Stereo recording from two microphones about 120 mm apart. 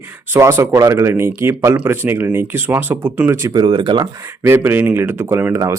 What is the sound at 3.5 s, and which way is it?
Speech, 35° right (ahead or behind).